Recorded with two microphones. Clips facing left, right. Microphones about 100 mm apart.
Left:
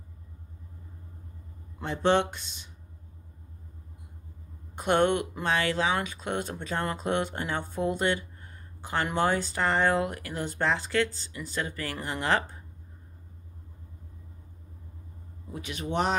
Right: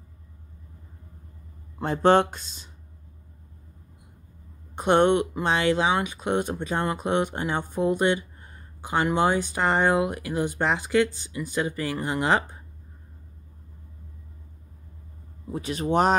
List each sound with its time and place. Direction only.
1.8 s speech: 40° right (ahead or behind)
4.7 s speech: 20° right (ahead or behind)
15.5 s speech: 35° right (ahead or behind)